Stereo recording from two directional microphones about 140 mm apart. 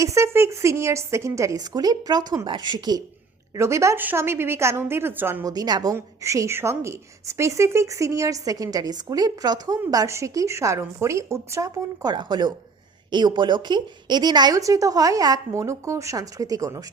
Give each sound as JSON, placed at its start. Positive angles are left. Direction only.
{"t": 0.0, "sound": "a woman's voice", "side_deg": -20}